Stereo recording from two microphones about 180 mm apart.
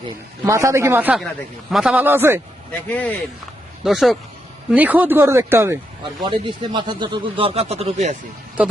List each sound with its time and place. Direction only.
0.4 s speech: 15° right (ahead or behind)
2.9 s speech: 10° left (ahead or behind); by 5.8 s 15° right (ahead or behind)
6.2 s speech: 25° right (ahead or behind)